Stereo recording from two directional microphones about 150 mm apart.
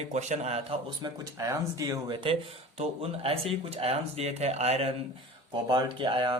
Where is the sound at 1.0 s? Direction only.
20° right (ahead or behind).